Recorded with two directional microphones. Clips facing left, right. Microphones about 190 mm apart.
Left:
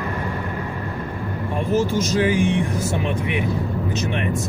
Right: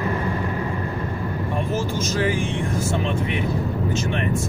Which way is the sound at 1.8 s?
15° left (ahead or behind).